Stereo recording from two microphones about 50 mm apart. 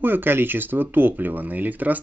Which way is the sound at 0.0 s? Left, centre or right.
Right.